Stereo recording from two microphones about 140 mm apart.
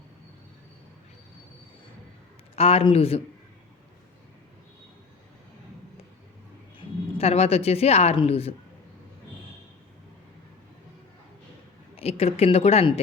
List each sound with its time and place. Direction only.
2.6 s speech: 45° left (ahead or behind)
6.7 s speech: 45° left (ahead or behind)
11.9 s a woman's voice: 45° left (ahead or behind)